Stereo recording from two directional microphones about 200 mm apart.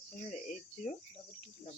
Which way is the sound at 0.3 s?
35° left (ahead or behind).